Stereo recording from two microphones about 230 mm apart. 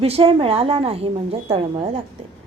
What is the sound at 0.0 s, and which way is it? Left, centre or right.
A woman's voice, right.